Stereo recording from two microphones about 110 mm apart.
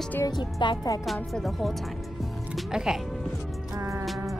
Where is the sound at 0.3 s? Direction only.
45° left (ahead or behind).